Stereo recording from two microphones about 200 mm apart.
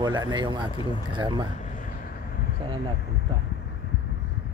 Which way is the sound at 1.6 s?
40° left (ahead or behind).